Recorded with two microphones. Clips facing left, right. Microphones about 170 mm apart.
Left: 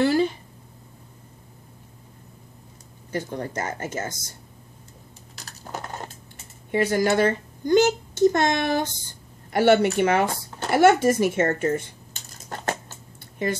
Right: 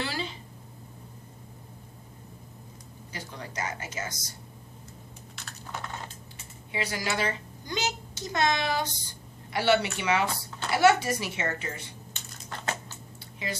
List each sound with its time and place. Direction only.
0.0 s a sound: 50° left (ahead or behind)
3.1 s speech: 50° left (ahead or behind)
5.3 s typing: 40° left (ahead or behind)
6.7 s speech: 50° left (ahead or behind)